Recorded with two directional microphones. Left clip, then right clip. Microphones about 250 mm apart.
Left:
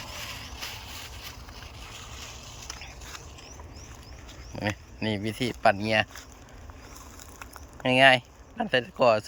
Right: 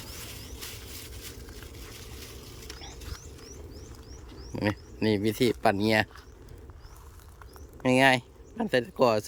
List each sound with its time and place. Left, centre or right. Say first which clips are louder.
0.3 s a sound: left 5 dB; centre
4.5 s speech: right 1 dB; centre
7.8 s speech: left 3 dB; centre